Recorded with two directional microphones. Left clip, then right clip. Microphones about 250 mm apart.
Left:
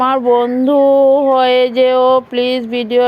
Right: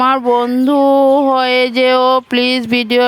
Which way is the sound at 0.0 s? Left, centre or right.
Right.